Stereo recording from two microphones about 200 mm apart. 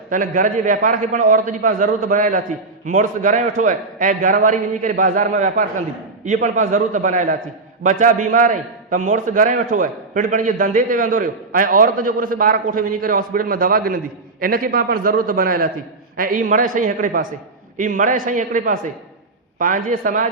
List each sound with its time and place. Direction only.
0.1 s a man's voice: 40° right (ahead or behind)